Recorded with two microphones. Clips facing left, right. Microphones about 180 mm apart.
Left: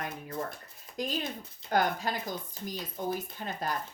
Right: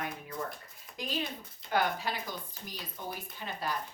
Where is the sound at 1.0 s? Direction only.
45° left (ahead or behind).